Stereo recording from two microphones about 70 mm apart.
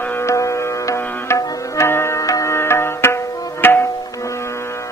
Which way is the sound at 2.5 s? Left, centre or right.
Left.